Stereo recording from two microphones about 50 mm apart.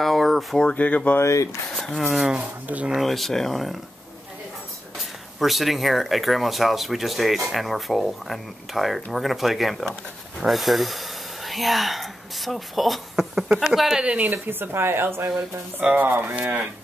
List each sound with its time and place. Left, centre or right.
0.0 s a sound: centre
0.7 s speech: left
1.2 s speech: left
2.0 s speech: centre
2.3 s speech: right
3.0 s speech: centre
5.4 s speech: centre
13.9 s speech: right
14.3 s speech: right
16.0 s speech: right
16.3 s speech: right